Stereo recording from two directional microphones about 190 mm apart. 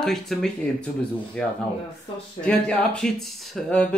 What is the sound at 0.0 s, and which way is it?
Speech, centre (ahead or behind).